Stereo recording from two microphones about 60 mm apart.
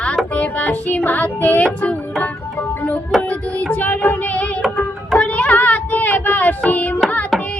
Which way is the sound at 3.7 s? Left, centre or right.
Left.